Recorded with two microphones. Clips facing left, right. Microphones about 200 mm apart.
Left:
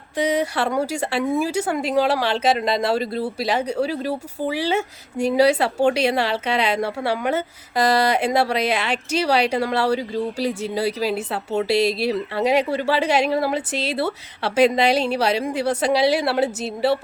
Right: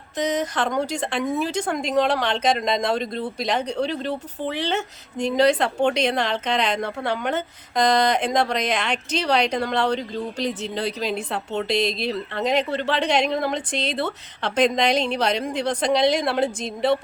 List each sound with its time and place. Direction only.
0.2 s speech: 10° left (ahead or behind)